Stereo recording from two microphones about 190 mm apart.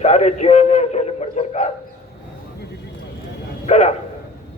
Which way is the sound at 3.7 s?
35° left (ahead or behind).